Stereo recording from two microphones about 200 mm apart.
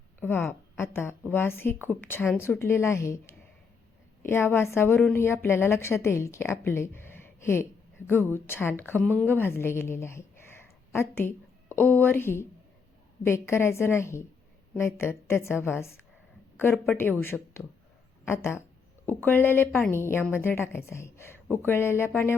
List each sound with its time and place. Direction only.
0.2 s a woman's voice: 10° left (ahead or behind)